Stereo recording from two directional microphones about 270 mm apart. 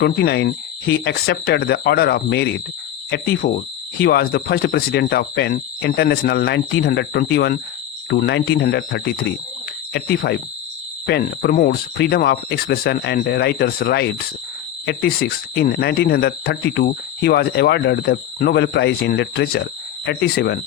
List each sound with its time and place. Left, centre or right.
0.0 s speech: left